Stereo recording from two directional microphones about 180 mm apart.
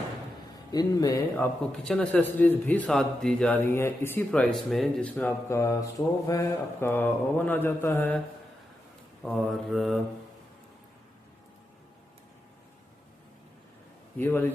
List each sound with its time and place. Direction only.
0.7 s speech: 20° left (ahead or behind)
1.7 s a man's voice: 5° left (ahead or behind)
9.2 s mantra: centre (ahead or behind)
14.2 s a man's voice: 10° left (ahead or behind)